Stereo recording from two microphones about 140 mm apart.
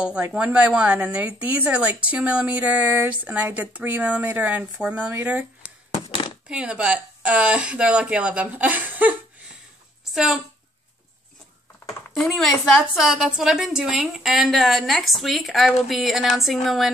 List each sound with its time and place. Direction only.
0.0 s a woman's voice: 10° right (ahead or behind)
6.0 s a sound: 35° left (ahead or behind)
6.5 s a woman's voice: 5° right (ahead or behind)
10.1 s a woman's voice: 5° right (ahead or behind)
12.3 s a woman's voice: centre (ahead or behind)